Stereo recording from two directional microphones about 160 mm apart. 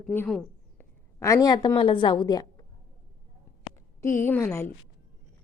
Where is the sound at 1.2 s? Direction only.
20° left (ahead or behind).